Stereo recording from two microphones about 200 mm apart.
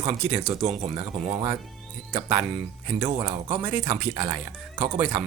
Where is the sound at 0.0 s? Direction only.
10° right (ahead or behind).